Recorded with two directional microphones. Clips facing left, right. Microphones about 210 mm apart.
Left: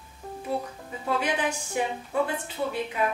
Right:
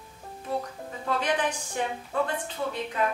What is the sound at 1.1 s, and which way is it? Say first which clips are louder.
Speech: even; 10° left (ahead or behind).